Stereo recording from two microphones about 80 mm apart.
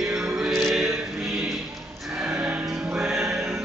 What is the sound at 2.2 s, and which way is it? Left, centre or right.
Music, centre.